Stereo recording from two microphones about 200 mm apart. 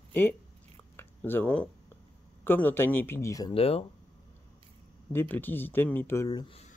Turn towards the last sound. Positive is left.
turn(degrees=15)  # may be behind; listen again after turning